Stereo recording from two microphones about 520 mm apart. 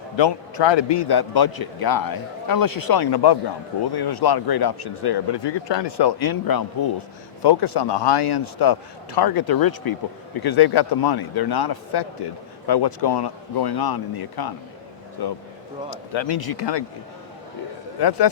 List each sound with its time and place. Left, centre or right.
0.2 s speech: left
18.0 s speech: left